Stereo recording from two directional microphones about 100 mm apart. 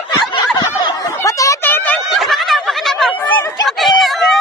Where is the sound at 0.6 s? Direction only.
45° left (ahead or behind).